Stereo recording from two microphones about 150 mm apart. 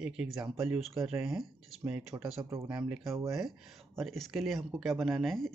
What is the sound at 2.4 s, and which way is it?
Speech, 20° right (ahead or behind).